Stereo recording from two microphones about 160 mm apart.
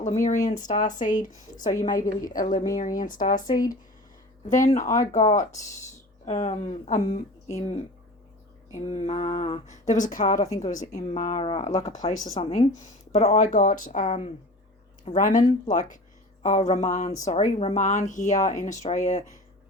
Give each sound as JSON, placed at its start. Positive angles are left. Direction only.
{"t": 0.0, "sound": "a woman's voice", "side_deg": 50}
{"t": 3.4, "sound": "speech", "side_deg": 25}
{"t": 4.4, "sound": "speech", "side_deg": 50}
{"t": 6.2, "sound": "speech", "side_deg": 45}
{"t": 11.4, "sound": "speech", "side_deg": 40}